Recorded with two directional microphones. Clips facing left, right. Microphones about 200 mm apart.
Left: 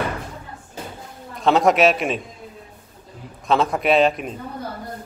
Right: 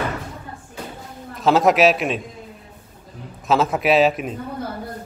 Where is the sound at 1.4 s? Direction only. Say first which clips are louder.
Right 1 dB; centre (ahead or behind).